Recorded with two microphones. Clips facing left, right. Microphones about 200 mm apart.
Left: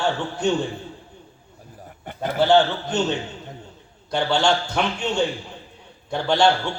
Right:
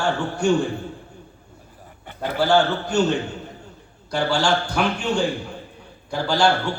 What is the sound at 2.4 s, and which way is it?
Speech, 20° left (ahead or behind).